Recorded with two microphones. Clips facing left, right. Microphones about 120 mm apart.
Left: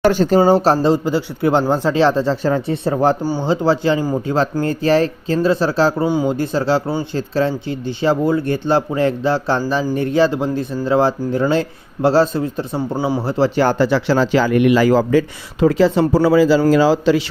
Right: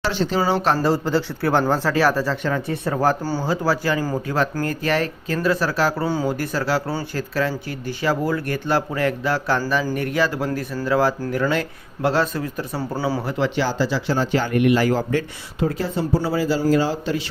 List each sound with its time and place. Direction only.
0.0 s speech: 45° left (ahead or behind)
0.8 s speech: 20° left (ahead or behind)
13.6 s speech: 60° left (ahead or behind); by 17.2 s 90° left